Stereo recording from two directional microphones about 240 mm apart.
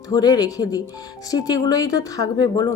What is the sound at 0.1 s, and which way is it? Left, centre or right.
Speech, centre.